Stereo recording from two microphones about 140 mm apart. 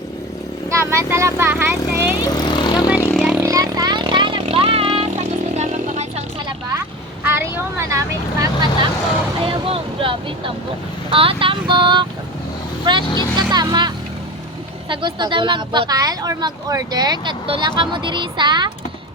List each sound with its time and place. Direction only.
0.7 s speech: 20° right (ahead or behind)
2.2 s vehicle: 30° left (ahead or behind)
3.2 s a sound: 5° right (ahead or behind)
3.4 s vehicle: 25° right (ahead or behind); by 6.2 s 55° right (ahead or behind)
7.3 s vehicle: 15° right (ahead or behind)
9.4 s vehicle: 40° right (ahead or behind)
11.1 s speech: 40° right (ahead or behind)